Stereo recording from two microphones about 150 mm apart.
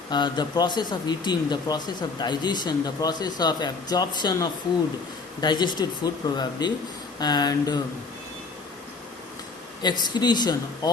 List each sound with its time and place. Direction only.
0.1 s speech: 30° left (ahead or behind)
9.8 s speech: 30° left (ahead or behind)